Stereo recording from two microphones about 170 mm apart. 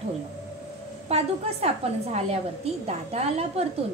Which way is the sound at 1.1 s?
40° right (ahead or behind).